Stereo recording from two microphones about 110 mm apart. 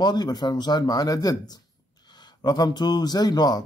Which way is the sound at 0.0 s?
40° left (ahead or behind).